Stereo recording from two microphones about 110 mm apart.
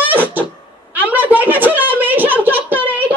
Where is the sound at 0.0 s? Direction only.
15° right (ahead or behind).